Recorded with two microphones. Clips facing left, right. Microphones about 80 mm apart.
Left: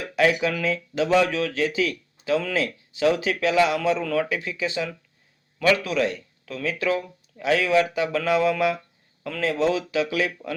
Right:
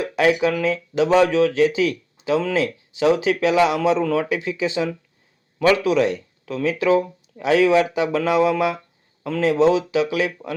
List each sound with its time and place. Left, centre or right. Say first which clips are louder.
0.0 s speech: right 3 dB; right